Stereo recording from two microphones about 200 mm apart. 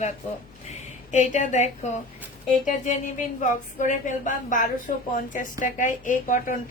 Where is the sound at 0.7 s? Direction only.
35° left (ahead or behind).